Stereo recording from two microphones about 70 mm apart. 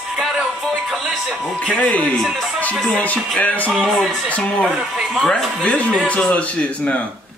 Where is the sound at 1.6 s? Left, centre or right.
Centre.